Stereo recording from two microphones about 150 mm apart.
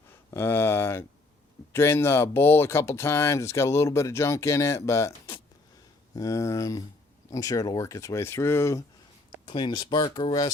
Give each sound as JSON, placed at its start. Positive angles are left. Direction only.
{"t": 0.3, "sound": "speech", "side_deg": 15}
{"t": 9.5, "sound": "speech", "side_deg": 30}